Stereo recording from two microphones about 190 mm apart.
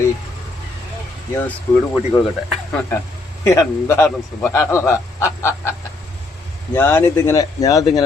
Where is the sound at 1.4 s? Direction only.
10° left (ahead or behind).